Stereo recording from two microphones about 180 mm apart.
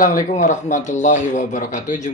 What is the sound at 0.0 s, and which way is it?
Speech, 50° left (ahead or behind).